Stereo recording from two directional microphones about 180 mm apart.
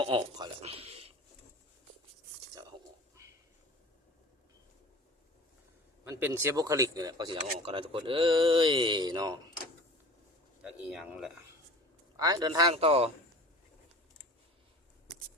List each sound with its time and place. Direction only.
0.0 s a man's voice: 25° right (ahead or behind)
3.2 s a sound: 15° right (ahead or behind)
6.1 s speech: 10° right (ahead or behind)
10.6 s speech: 5° right (ahead or behind)
12.1 s speech: 20° right (ahead or behind)
12.7 s a man's voice: 35° right (ahead or behind)